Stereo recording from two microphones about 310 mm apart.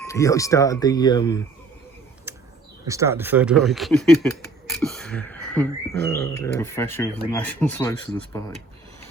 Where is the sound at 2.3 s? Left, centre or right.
Centre.